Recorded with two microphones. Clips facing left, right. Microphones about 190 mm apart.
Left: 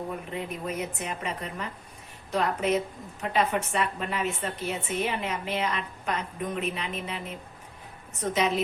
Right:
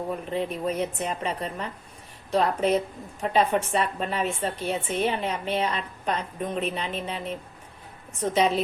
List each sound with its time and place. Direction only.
0.3 s a woman's voice: 30° right (ahead or behind)
8.2 s a woman's voice: 30° right (ahead or behind)